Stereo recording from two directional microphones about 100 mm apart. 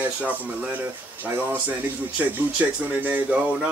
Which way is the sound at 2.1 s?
15° right (ahead or behind).